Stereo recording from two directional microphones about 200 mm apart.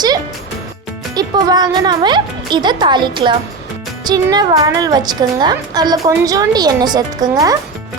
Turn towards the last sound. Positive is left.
turn(degrees=-20)  # may be behind; listen again after turning